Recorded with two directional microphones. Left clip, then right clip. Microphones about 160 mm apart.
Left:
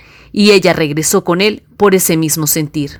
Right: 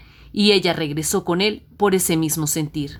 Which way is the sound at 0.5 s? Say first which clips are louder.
Left 12 dB; 40° left (ahead or behind).